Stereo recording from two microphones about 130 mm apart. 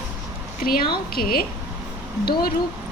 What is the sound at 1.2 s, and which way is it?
Speech, 90° left.